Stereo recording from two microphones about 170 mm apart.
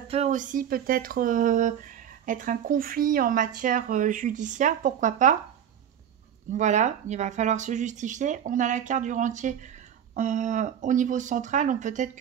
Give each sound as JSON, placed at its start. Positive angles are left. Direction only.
{"t": 0.1, "sound": "speech", "side_deg": -45}
{"t": 6.5, "sound": "speech", "side_deg": -45}